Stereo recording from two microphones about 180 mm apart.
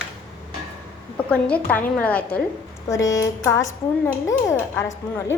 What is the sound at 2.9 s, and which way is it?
A woman's voice, 20° left (ahead or behind).